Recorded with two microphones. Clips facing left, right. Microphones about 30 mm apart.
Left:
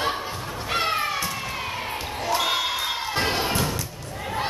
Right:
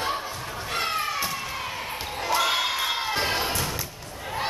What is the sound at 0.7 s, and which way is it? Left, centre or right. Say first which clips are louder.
Music: left 3 dB; centre.